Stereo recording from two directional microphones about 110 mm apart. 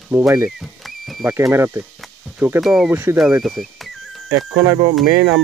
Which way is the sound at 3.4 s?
Centre (ahead or behind).